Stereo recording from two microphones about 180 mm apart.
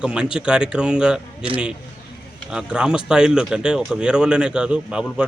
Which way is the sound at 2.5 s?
5° right (ahead or behind).